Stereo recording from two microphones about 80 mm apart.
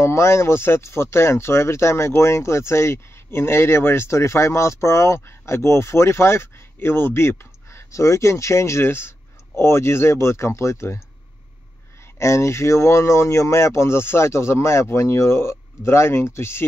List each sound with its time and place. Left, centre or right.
0.0 s speech: left
12.2 s speech: left